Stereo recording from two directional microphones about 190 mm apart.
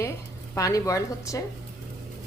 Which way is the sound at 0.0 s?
15° left (ahead or behind).